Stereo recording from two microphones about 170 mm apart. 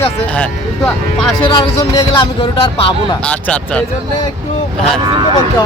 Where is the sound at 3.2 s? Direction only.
5° left (ahead or behind).